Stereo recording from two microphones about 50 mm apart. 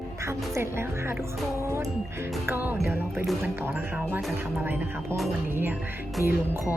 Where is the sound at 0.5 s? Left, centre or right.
Right.